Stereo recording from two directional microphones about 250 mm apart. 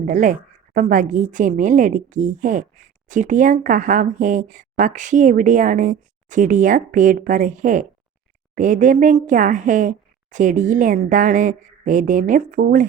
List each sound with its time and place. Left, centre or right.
0.0 s a woman's voice: right